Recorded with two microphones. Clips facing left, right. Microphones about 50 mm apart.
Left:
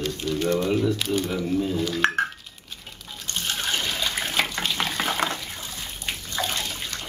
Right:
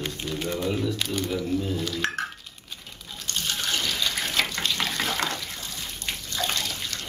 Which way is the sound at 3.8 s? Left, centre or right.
Left.